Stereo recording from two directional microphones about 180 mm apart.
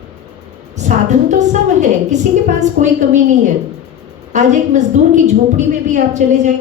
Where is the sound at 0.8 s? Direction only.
40° right (ahead or behind).